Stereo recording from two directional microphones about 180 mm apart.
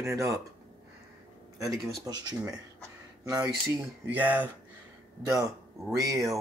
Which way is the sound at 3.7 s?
10° right (ahead or behind).